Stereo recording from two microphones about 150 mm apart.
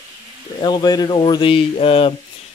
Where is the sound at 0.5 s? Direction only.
30° left (ahead or behind).